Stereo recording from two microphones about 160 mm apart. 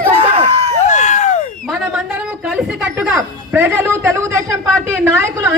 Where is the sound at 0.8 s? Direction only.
50° left (ahead or behind).